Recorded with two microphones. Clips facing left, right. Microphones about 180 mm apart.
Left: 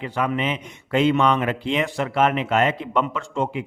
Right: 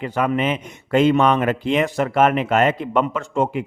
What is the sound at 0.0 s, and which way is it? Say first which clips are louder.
Speech: right 4 dB; 50° right (ahead or behind).